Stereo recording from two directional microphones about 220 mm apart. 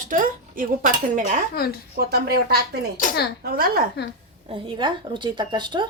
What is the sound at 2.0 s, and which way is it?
Speech, 45° right (ahead or behind).